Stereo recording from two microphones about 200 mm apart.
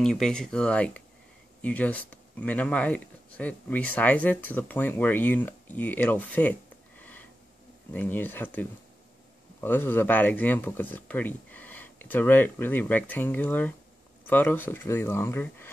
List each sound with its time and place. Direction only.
0.0 s speech: 5° left (ahead or behind)
7.0 s a sound: 10° left (ahead or behind)
7.9 s speech: 10° left (ahead or behind)